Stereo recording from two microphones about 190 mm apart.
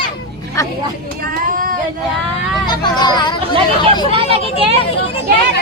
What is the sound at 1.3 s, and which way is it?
Speech, 45° right (ahead or behind).